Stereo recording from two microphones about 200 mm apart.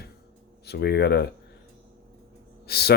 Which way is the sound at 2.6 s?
50° left (ahead or behind).